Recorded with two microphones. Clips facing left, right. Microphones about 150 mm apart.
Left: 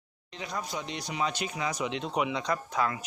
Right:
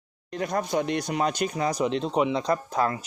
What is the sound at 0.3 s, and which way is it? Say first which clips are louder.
Speech: right 10 dB; 50° right (ahead or behind).